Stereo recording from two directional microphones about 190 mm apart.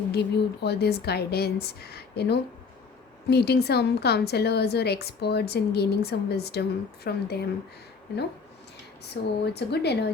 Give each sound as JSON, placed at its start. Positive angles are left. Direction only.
{"t": 0.1, "sound": "a woman's voice", "side_deg": 60}
{"t": 9.2, "sound": "a woman's voice", "side_deg": 60}